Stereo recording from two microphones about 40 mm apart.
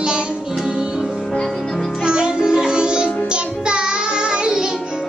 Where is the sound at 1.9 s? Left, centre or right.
Right.